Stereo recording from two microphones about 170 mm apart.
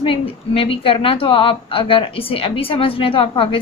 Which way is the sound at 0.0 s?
35° left (ahead or behind).